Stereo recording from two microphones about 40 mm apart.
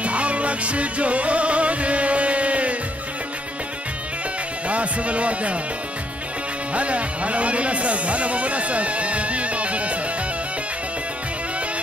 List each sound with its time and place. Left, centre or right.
0.0 s music: right
4.6 s speech: right
6.7 s speech: right